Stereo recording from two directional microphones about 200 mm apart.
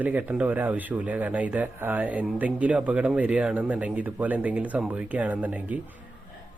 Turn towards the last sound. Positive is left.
turn(degrees=-5)  # may be behind; listen again after turning